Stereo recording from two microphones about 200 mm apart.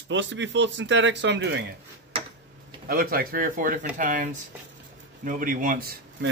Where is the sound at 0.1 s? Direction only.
65° right (ahead or behind).